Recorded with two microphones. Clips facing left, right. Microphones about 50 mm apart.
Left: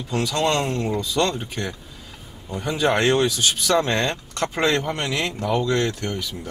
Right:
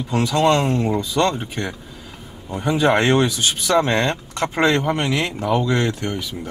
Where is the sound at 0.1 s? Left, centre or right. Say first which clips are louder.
Right 5 dB; centre.